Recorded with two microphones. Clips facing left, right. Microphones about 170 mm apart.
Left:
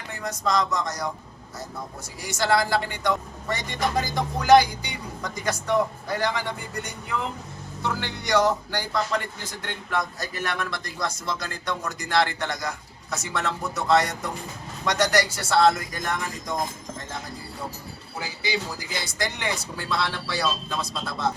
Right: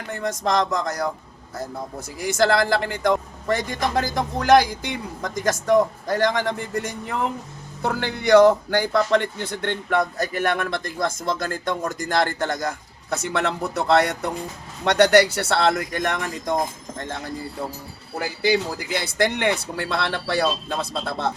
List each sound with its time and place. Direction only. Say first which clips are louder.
0.1 s speech: right 3 dB; 50° right (ahead or behind)
2.2 s speech: right 4 dB; 50° right (ahead or behind)
18.2 s speech: right 8 dB; 60° right (ahead or behind)